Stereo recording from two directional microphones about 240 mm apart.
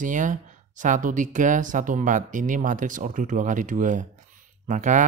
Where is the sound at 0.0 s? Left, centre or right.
Right.